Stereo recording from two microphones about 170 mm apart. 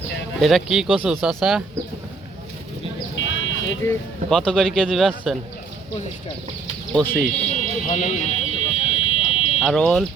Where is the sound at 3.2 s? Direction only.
90° left.